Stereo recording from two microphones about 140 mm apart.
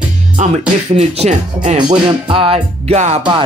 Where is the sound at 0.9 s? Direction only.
45° right (ahead or behind).